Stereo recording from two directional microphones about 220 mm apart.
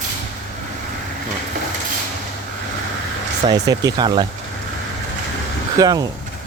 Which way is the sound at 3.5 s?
20° right (ahead or behind).